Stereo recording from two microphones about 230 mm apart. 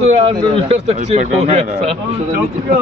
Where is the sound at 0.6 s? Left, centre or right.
Right.